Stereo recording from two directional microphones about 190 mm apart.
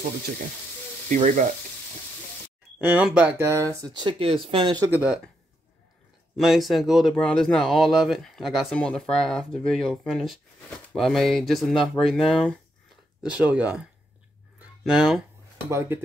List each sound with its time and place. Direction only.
1.0 s speech: 40° right (ahead or behind)
2.8 s speech: 5° right (ahead or behind); by 4.9 s 25° right (ahead or behind)
4.9 s speech: 5° right (ahead or behind)
6.3 s speech: centre (ahead or behind)